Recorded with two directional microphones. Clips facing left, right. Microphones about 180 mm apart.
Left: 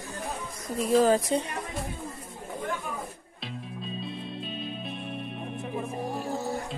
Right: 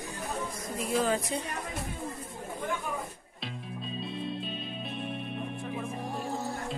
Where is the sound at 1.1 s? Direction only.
35° left (ahead or behind).